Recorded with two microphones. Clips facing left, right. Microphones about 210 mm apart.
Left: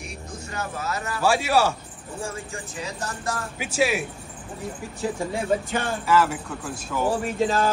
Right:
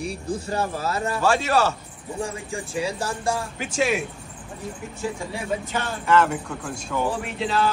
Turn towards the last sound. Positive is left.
turn(degrees=45)  # may be behind; listen again after turning